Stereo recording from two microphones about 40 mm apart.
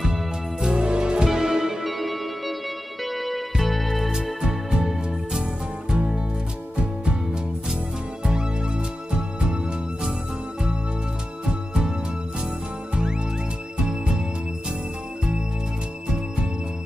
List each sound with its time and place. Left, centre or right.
0.0 s music: centre
0.7 s music: right
1.9 s music: centre
4.1 s music: centre
8.2 s music: right
12.9 s music: right